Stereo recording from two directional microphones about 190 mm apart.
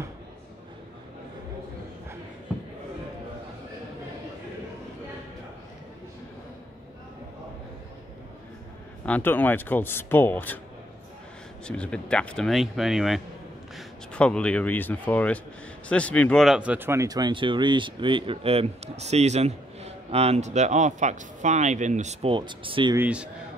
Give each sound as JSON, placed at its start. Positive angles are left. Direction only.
{"t": 9.0, "sound": "speech", "side_deg": 10}
{"t": 11.6, "sound": "speech", "side_deg": 5}
{"t": 22.3, "sound": "speech", "side_deg": -25}
{"t": 22.9, "sound": "a man's voice", "side_deg": -5}